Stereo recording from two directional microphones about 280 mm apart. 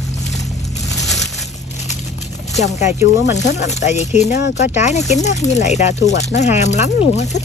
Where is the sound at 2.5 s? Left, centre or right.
Left.